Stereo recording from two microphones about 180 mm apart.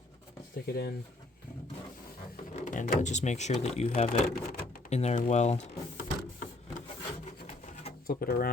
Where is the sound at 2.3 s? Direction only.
45° left (ahead or behind).